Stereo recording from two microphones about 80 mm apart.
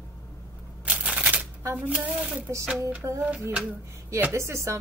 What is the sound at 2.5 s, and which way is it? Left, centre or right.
Speech, right.